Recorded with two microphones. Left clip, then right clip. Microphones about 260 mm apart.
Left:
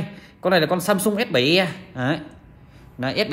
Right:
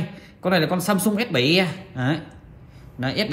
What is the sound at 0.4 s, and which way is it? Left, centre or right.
Speech, left.